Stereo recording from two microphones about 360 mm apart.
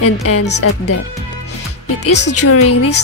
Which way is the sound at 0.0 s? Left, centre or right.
Left.